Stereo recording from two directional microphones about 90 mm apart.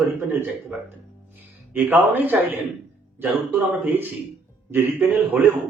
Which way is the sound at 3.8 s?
20° right (ahead or behind).